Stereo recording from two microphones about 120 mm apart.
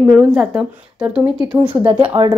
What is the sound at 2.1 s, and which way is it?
Speech, 30° right (ahead or behind).